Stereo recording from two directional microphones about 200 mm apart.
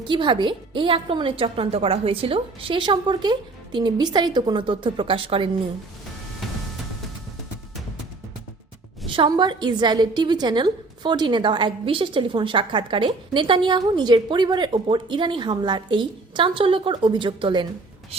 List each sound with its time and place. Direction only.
0.0 s a woman's voice: 25° right (ahead or behind)
9.0 s a woman's voice: 25° right (ahead or behind)